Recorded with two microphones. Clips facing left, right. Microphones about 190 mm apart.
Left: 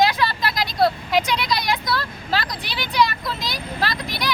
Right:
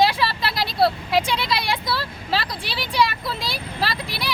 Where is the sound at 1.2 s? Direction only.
30° right (ahead or behind).